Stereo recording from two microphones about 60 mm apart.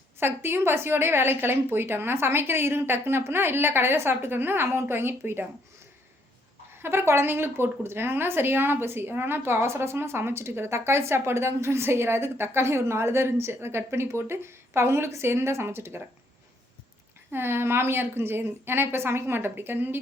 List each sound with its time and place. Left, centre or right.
0.2 s a woman's voice: right
6.8 s speech: right
17.3 s a woman's voice: right